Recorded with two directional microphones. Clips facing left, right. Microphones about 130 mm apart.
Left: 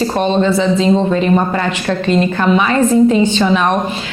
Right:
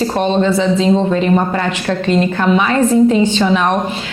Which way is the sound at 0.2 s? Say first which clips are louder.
Even; 20° left (ahead or behind).